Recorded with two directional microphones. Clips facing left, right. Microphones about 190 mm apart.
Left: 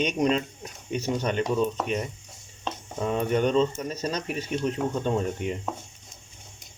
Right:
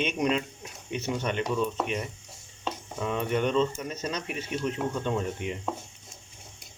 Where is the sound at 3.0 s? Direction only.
40° left (ahead or behind).